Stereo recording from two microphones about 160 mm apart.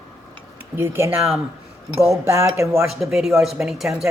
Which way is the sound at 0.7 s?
15° right (ahead or behind).